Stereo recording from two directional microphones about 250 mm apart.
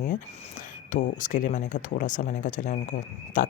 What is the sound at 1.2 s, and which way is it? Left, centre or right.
Speech, left.